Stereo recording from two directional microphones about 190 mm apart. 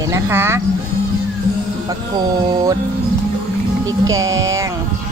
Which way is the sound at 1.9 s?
20° right (ahead or behind).